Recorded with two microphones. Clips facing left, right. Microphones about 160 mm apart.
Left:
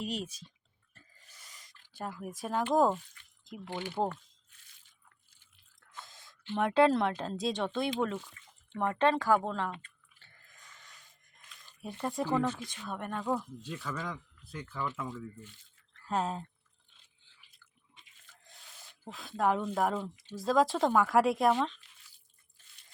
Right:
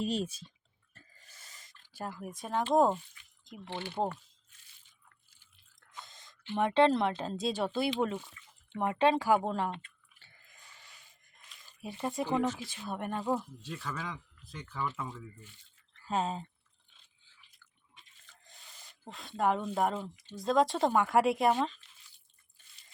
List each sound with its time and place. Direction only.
0.0 s speech: 30° right (ahead or behind)
1.9 s speech: 5° right (ahead or behind)
6.0 s a sound: centre (ahead or behind)
6.6 s speech: centre (ahead or behind); by 9.6 s 15° right (ahead or behind)
10.7 s a sound: 10° right (ahead or behind)
12.2 s speech: 15° right (ahead or behind); by 16.5 s centre (ahead or behind)
18.8 s speech: centre (ahead or behind)